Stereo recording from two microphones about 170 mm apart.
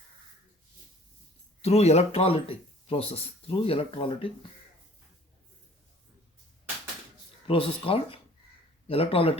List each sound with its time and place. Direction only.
1.6 s speech: 40° left (ahead or behind)
7.4 s speech: 35° left (ahead or behind)